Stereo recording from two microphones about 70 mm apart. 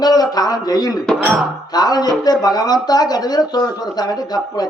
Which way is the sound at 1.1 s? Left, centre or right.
Centre.